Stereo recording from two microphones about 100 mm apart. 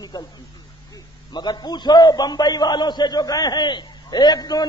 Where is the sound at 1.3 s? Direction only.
45° left (ahead or behind).